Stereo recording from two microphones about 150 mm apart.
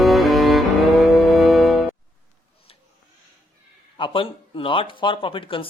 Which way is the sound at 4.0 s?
35° left (ahead or behind).